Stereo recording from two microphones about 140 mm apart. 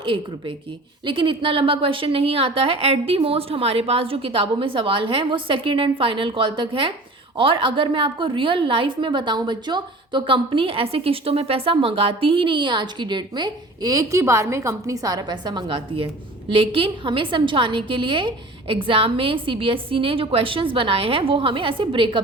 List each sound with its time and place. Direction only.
0.0 s a woman's voice: 35° right (ahead or behind)